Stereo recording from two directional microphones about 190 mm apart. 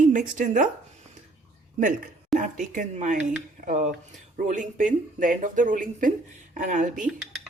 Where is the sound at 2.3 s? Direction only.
40° right (ahead or behind).